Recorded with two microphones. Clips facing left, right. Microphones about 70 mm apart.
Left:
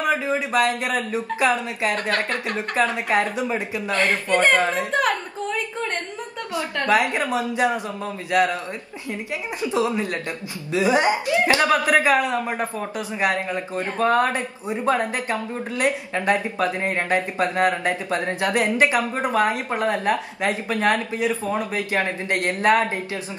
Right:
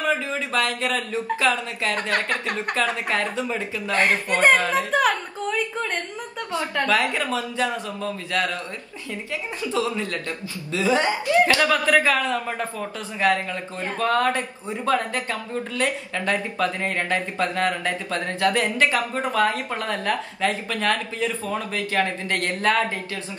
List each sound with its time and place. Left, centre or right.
0.0 s speech: centre
3.9 s speech: right
4.6 s speech: left
6.5 s speech: centre
9.6 s speech: left